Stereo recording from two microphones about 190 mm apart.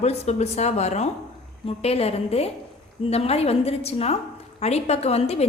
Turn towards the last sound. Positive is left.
turn(degrees=35)  # may be behind; listen again after turning